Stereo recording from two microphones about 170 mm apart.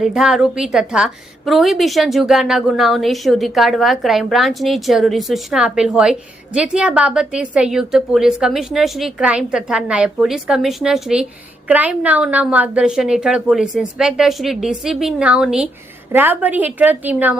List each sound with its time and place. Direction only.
0.0 s a woman's voice: centre (ahead or behind)